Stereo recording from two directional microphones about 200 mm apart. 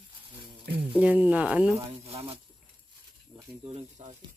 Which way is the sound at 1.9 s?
30° right (ahead or behind).